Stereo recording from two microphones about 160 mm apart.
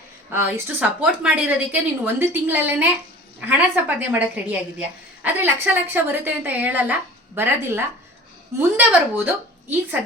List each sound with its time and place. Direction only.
0.3 s a woman's voice: 15° right (ahead or behind)